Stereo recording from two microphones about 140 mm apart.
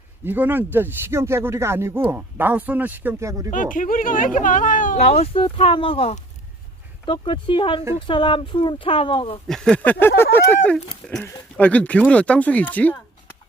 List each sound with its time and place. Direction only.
0.3 s speech: 15° right (ahead or behind)
3.5 s speech: 70° left (ahead or behind); by 9.4 s 40° left (ahead or behind)
9.5 s speech: 5° left (ahead or behind)
11.0 s speech: 5° left (ahead or behind)